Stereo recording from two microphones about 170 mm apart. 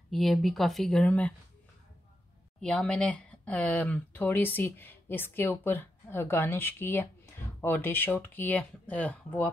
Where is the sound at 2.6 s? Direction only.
5° left (ahead or behind).